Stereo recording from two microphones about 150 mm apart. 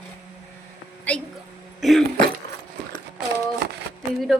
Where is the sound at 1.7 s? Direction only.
Centre (ahead or behind).